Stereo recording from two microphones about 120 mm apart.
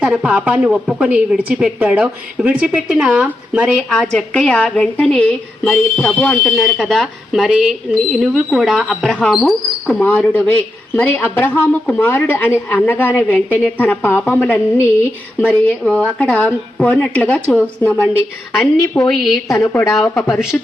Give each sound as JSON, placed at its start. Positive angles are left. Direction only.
{"t": 0.0, "sound": "a woman's voice", "side_deg": -10}
{"t": 19.1, "sound": "a woman's voice", "side_deg": 0}
{"t": 19.5, "sound": "a woman's voice", "side_deg": 25}